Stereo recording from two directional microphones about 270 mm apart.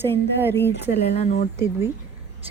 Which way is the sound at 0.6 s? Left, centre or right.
Left.